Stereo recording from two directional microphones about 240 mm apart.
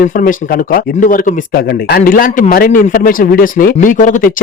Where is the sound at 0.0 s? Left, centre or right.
Left.